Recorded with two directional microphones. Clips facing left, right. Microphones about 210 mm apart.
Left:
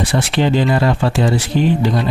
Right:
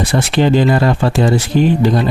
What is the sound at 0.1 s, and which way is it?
Speech, 45° right (ahead or behind).